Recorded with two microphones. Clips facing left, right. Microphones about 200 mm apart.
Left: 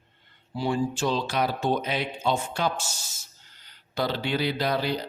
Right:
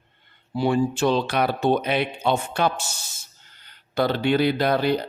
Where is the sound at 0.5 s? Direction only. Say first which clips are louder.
Right 5 dB; 60° right (ahead or behind).